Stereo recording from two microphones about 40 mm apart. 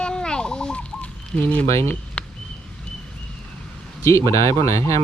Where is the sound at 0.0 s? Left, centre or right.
Left.